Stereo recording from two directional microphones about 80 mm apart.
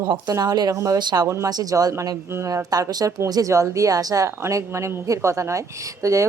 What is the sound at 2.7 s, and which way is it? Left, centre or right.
A woman's voice, right.